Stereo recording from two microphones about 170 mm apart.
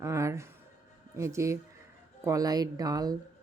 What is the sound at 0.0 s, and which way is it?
Music, 15° right (ahead or behind).